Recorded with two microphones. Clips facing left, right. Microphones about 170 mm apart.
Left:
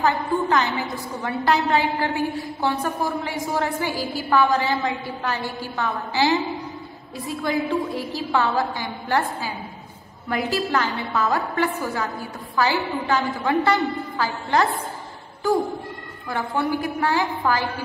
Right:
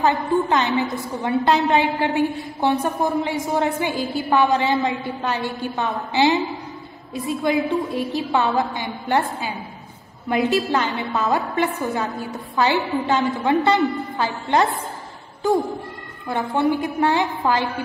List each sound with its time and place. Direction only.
0.0 s a woman's voice: 20° right (ahead or behind)
16.3 s a woman's voice: 25° right (ahead or behind)